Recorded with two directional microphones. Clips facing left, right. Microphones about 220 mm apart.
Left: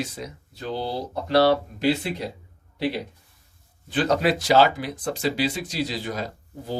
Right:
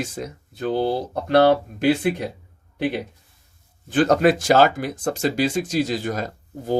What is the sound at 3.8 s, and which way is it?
Speech, 45° right (ahead or behind).